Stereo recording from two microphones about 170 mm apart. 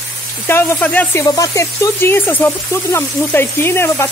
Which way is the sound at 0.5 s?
15° left (ahead or behind).